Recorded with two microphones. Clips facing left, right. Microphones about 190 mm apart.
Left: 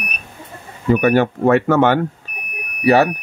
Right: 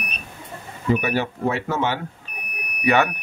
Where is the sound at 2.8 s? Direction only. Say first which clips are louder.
Left 6 dB; 35° left (ahead or behind).